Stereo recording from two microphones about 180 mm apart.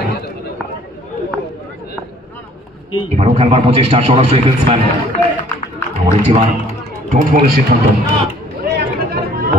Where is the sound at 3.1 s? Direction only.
35° right (ahead or behind).